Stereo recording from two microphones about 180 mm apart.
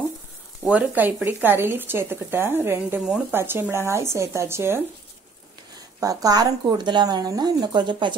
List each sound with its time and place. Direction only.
0.7 s speech: 10° right (ahead or behind)
5.9 s speech: 20° right (ahead or behind)